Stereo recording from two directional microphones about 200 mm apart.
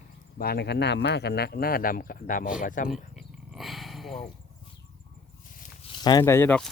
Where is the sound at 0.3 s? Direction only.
50° left (ahead or behind).